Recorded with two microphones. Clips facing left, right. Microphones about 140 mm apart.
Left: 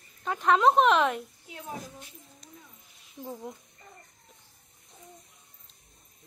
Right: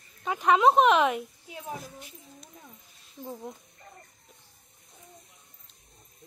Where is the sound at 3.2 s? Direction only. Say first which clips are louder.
Even; 15° left (ahead or behind).